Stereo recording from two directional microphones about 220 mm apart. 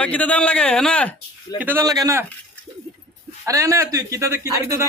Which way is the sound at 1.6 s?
10° right (ahead or behind).